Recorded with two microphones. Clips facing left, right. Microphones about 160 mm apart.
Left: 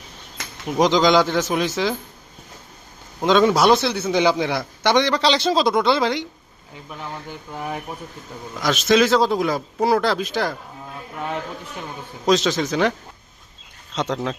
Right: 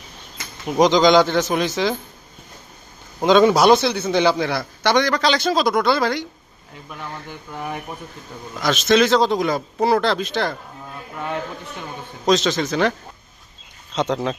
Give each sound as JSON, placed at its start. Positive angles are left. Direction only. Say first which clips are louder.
{"t": 0.8, "sound": "a man's voice", "louder": "right 2 dB", "side_deg": 0}
{"t": 3.2, "sound": "a man's voice", "louder": "right 2 dB", "side_deg": 0}
{"t": 12.2, "sound": "a man's voice", "louder": "even", "side_deg": 10}
{"t": 13.9, "sound": "speech", "louder": "right 3 dB", "side_deg": 0}